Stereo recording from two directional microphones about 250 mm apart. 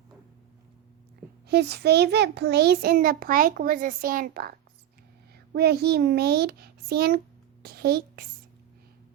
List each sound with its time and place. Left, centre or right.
1.5 s a child's voice: right
5.5 s a child's voice: right